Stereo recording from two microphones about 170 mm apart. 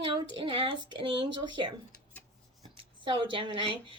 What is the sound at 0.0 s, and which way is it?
Speech, 30° right (ahead or behind).